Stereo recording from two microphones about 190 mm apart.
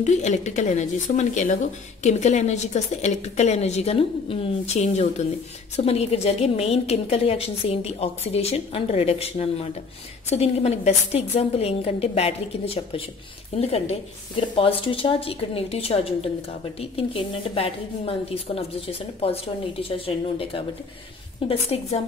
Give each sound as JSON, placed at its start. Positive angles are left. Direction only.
{"t": 0.0, "sound": "a woman's voice", "side_deg": 35}